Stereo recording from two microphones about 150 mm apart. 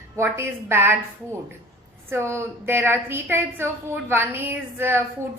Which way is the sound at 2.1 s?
15° right (ahead or behind).